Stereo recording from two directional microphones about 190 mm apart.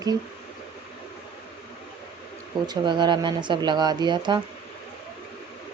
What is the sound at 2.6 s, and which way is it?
Speech, 25° right (ahead or behind).